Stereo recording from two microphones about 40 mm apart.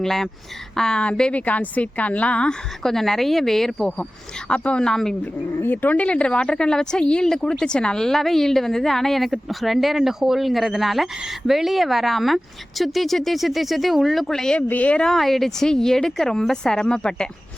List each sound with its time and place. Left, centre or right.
0.0 s speech: centre
1.3 s a woman's voice: left
2.8 s speech: centre
4.4 s speech: left
4.9 s speech: centre
5.7 s speech: left
6.1 s speech: left
8.0 s speech: centre
14.3 s speech: centre
14.7 s a woman's voice: left
15.1 s speech: centre; by 17.2 s left